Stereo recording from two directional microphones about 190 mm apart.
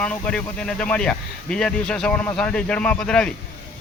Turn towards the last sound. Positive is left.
turn(degrees=5)  # may be behind; listen again after turning